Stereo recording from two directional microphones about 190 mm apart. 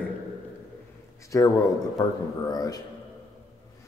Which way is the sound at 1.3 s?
15° left (ahead or behind).